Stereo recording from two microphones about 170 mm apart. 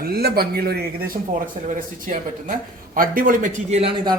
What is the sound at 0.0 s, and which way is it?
A man's voice, 65° right (ahead or behind).